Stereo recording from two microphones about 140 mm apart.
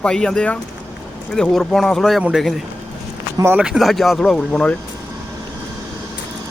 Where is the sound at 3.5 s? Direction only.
5° right (ahead or behind).